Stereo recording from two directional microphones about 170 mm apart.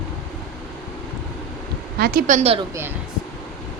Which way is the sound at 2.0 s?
55° right (ahead or behind).